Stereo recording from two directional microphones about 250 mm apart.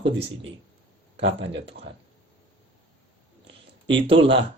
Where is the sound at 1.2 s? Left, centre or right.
Right.